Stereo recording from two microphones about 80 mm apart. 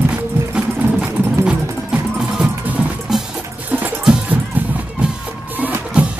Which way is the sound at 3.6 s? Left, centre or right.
Right.